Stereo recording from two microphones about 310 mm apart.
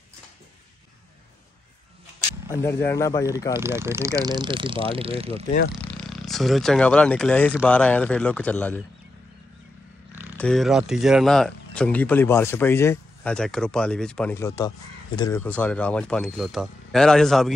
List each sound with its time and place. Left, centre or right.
2.5 s speech: centre
3.5 s speech: centre
5.8 s speech: centre
10.3 s speech: centre